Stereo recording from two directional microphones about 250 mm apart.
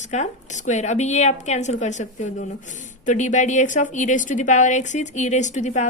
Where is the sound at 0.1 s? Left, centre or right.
Left.